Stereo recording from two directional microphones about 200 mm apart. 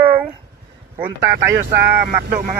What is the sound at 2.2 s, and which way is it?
Speech, 45° right (ahead or behind).